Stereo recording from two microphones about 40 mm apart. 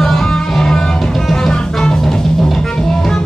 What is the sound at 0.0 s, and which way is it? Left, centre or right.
Music, centre.